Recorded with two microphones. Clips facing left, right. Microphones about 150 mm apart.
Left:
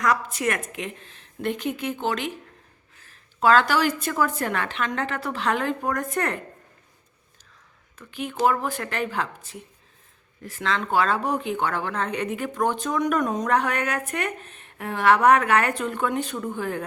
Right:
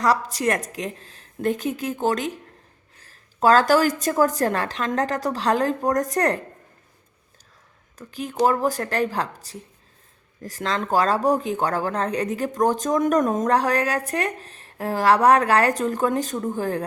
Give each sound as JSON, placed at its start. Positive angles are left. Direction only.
{"t": 0.0, "sound": "speech", "side_deg": -35}
{"t": 7.9, "sound": "speech", "side_deg": -40}